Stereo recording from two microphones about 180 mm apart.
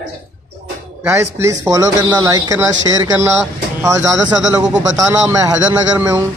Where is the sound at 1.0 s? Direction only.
15° right (ahead or behind).